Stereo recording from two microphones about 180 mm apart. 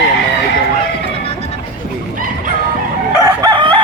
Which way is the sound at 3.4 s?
20° right (ahead or behind).